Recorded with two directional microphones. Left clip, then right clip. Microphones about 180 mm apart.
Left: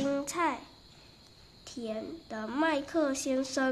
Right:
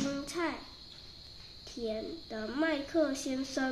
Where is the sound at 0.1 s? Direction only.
45° left (ahead or behind).